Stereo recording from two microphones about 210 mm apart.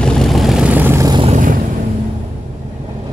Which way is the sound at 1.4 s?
40° right (ahead or behind).